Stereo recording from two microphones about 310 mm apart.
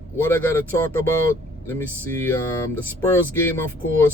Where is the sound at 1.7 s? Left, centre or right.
Centre.